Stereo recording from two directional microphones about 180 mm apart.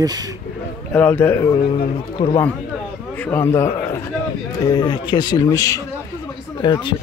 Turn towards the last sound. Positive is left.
turn(degrees=25)  # may be behind; listen again after turning